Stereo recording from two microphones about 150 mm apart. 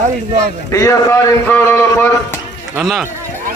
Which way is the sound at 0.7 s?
20° left (ahead or behind).